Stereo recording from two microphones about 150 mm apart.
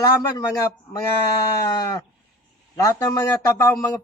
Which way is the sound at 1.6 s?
20° left (ahead or behind).